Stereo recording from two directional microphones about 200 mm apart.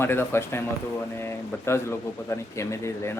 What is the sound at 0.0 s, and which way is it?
Speech, 10° left (ahead or behind).